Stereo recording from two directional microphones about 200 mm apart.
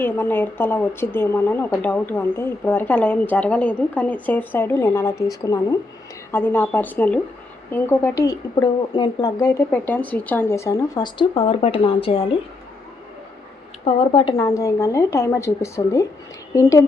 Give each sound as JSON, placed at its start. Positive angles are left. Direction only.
{"t": 0.0, "sound": "a woman's voice", "side_deg": 10}
{"t": 13.8, "sound": "a woman's voice", "side_deg": 25}